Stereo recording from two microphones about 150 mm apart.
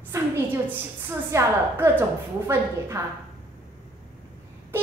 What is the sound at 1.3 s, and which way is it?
Speech, 15° right (ahead or behind).